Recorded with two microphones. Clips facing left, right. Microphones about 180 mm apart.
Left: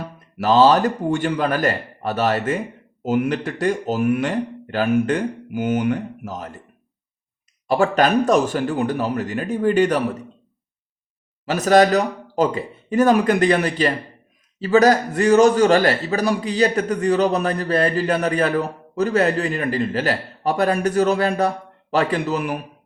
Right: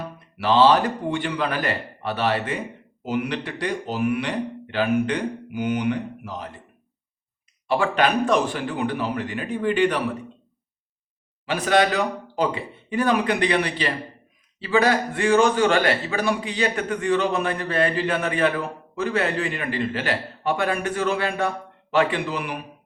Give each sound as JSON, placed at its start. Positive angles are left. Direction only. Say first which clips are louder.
{"t": 0.3, "sound": "speech", "louder": "left 3 dB", "side_deg": 45}
{"t": 7.7, "sound": "speech", "louder": "left 4 dB", "side_deg": 40}
{"t": 11.4, "sound": "a man's voice", "louder": "left 5 dB", "side_deg": 40}